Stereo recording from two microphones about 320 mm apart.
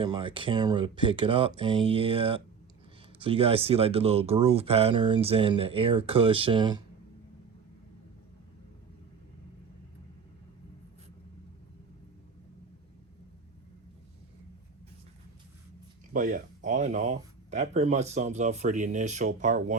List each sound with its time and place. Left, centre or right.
0.0 s speech: centre
16.1 s speech: right